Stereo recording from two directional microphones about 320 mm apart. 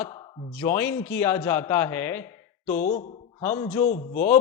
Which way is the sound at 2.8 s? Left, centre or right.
Left.